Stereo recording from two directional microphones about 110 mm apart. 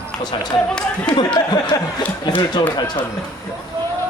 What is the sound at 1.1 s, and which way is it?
Speech, 45° left (ahead or behind).